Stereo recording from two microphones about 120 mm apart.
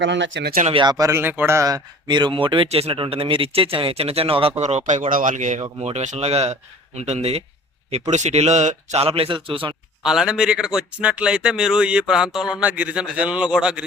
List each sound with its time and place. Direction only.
0.7 s a man's voice: 40° right (ahead or behind)
2.6 s speech: 55° right (ahead or behind); by 5.6 s 90° right
5.8 s speech: 70° right (ahead or behind); by 9.7 s 45° right (ahead or behind)
10.0 s speech: 5° right (ahead or behind)